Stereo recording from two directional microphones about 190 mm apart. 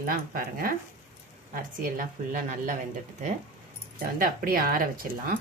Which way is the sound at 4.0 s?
50° right (ahead or behind).